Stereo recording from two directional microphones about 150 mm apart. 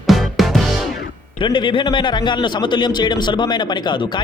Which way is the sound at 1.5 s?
30° left (ahead or behind).